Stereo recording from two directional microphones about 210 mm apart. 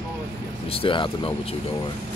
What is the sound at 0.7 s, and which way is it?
Speech, 25° left (ahead or behind).